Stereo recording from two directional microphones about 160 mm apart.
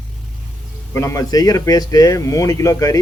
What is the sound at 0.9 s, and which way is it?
Speech, 20° left (ahead or behind).